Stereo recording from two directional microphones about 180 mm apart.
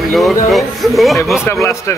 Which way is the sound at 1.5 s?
15° left (ahead or behind).